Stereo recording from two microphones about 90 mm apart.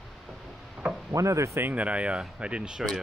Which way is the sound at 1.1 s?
35° right (ahead or behind).